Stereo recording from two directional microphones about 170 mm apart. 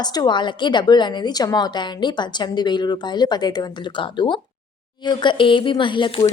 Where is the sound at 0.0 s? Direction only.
25° left (ahead or behind).